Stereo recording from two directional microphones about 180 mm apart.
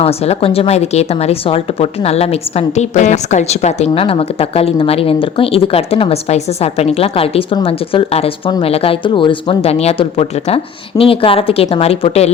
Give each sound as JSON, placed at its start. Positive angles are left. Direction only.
{"t": 0.0, "sound": "speech", "side_deg": 35}